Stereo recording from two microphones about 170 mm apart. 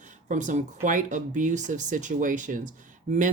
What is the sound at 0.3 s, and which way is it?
Speech, 45° right (ahead or behind).